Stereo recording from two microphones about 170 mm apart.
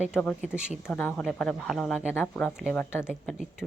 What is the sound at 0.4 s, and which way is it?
Speech, 5° right (ahead or behind).